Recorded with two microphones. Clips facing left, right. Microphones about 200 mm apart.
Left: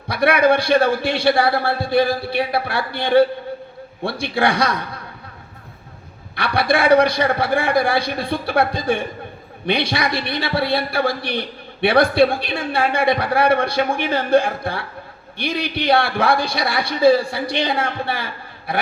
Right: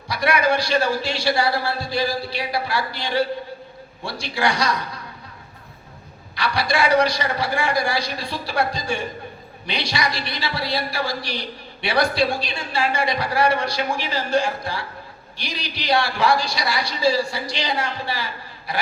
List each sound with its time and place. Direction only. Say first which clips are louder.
0.1 s a man's voice: left 5 dB; 60° left (ahead or behind)
6.3 s a man's voice: left 4 dB; 55° left (ahead or behind)
18.7 s a sound: left 4 dB; 55° left (ahead or behind)